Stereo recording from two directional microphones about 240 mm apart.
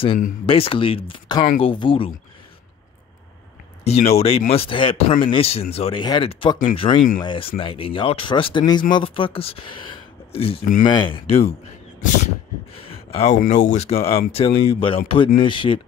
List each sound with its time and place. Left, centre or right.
0.5 s speech: left
3.8 s speech: left
13.1 s speech: left